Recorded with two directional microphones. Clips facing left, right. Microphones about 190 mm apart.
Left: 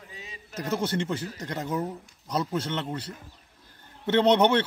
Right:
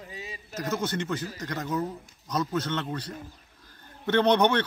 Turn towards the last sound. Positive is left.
turn(degrees=25)  # may be behind; listen again after turning